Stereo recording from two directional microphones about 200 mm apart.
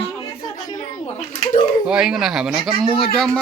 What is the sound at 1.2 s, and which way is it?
Pigeon, 35° left (ahead or behind).